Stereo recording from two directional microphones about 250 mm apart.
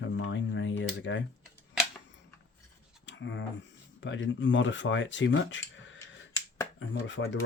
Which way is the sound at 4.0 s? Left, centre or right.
Left.